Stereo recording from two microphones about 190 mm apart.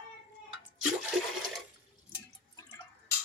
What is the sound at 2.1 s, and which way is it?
Drip, 20° left (ahead or behind).